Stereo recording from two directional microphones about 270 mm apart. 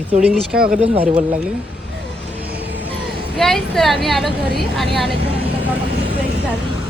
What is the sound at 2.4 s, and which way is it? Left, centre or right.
Music, centre.